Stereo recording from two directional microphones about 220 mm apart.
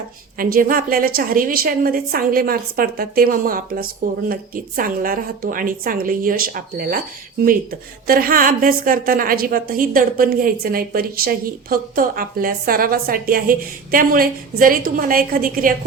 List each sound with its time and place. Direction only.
0.3 s a woman's voice: 40° right (ahead or behind)